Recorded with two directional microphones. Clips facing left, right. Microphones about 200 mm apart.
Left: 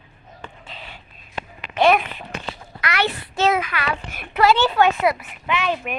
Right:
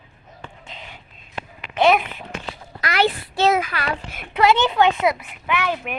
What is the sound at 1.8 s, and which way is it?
Speech, 10° right (ahead or behind).